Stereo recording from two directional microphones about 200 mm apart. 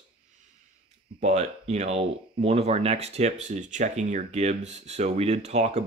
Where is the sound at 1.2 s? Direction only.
35° right (ahead or behind).